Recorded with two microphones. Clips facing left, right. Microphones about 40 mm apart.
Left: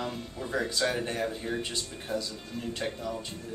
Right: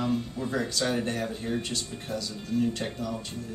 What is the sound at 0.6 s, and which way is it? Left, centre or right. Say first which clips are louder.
Speech: right 1 dB; centre.